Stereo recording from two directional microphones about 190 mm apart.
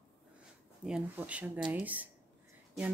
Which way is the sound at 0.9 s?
5° right (ahead or behind).